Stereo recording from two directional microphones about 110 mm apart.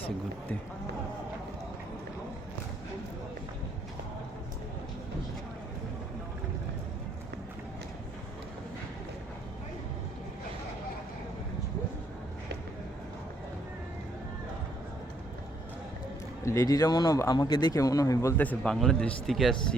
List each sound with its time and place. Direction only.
16.4 s speech: 25° left (ahead or behind)
18.3 s speech: 10° left (ahead or behind)